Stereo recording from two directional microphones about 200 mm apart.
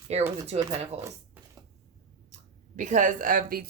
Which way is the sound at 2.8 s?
40° right (ahead or behind).